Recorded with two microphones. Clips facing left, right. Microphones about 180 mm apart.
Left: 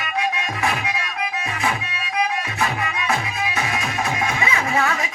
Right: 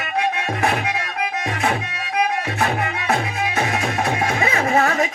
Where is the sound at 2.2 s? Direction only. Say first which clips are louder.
Right 2 dB; 55° right (ahead or behind).